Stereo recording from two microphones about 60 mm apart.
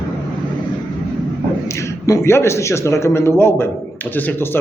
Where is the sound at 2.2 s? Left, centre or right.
Left.